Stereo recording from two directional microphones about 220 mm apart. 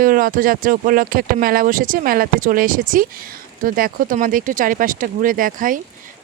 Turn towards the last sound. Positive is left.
turn(degrees=-40)  # may be behind; listen again after turning